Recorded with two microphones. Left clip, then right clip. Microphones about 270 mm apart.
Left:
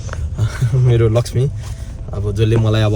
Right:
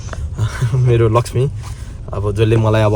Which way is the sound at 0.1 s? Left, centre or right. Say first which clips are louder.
Right 1 dB; centre.